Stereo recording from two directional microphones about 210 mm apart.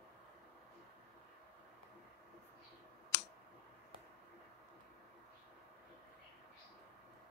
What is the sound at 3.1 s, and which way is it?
Clicking, 55° left (ahead or behind).